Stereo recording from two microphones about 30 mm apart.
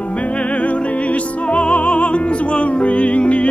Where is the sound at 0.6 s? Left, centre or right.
Left.